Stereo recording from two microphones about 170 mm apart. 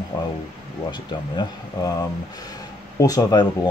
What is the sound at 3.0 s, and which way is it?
Speech, 20° left (ahead or behind).